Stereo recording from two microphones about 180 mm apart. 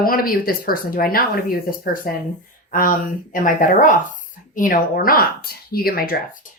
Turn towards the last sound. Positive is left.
turn(degrees=55)  # may be behind; listen again after turning